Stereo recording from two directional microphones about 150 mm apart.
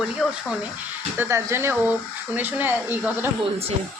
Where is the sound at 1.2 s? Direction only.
20° right (ahead or behind).